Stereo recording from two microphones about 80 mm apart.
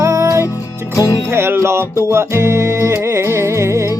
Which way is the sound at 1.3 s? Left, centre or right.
Right.